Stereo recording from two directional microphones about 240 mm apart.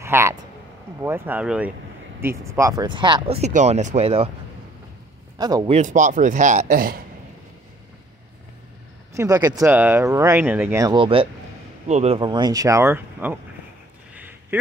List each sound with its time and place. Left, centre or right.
0.0 s a sound: centre
1.0 s speech: centre; by 4.3 s right
5.4 s speech: centre
5.8 s speech: right
9.1 s speech: centre
14.5 s a man's voice: centre